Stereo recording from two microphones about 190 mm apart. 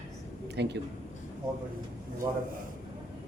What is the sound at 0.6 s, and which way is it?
Speech, 65° right (ahead or behind).